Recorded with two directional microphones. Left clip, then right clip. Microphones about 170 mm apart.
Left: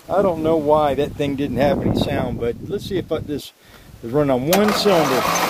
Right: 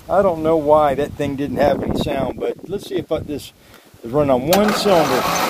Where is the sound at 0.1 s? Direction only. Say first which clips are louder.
Right 2 dB; 20° left (ahead or behind).